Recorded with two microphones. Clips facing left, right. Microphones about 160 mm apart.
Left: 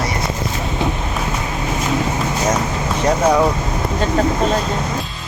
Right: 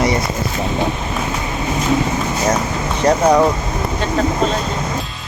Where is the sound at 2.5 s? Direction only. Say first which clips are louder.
Right 1 dB; centre (ahead or behind).